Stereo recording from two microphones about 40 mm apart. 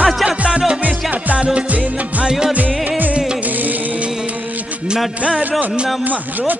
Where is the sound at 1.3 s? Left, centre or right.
Right.